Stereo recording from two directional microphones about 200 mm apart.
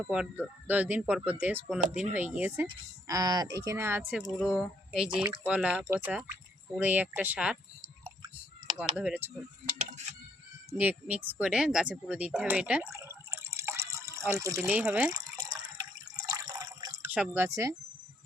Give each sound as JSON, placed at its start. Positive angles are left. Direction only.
{"t": 0.1, "sound": "speech", "side_deg": -5}
{"t": 3.1, "sound": "speech", "side_deg": -20}
{"t": 8.8, "sound": "speech", "side_deg": -5}
{"t": 10.7, "sound": "speech", "side_deg": -5}
{"t": 15.1, "sound": "water", "side_deg": -20}
{"t": 17.2, "sound": "speech", "side_deg": -10}